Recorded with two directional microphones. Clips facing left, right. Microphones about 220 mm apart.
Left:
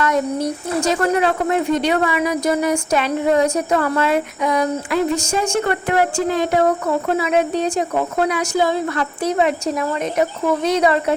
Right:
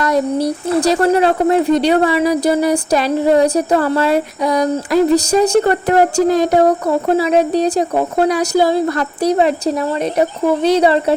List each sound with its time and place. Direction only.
0.0 s speech: 35° right (ahead or behind)